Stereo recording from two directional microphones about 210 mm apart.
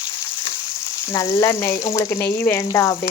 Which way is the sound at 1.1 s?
15° left (ahead or behind).